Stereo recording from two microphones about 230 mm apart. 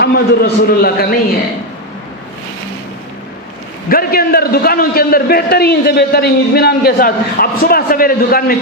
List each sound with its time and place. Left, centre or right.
0.0 s a man's voice: left
3.8 s a man's voice: left